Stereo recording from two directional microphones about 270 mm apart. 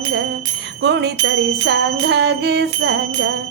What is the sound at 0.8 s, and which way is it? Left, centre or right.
Bicycle bell, right.